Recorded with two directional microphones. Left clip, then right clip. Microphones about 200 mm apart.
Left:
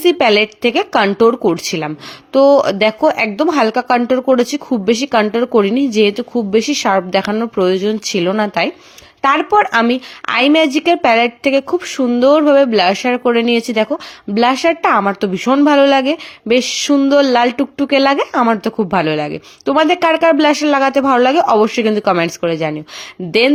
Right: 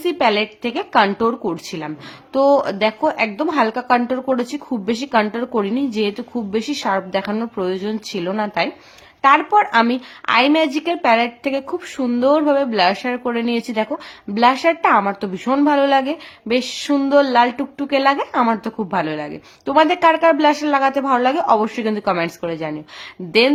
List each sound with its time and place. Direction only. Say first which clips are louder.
0.0 s speech: left 6 dB; 25° left (ahead or behind)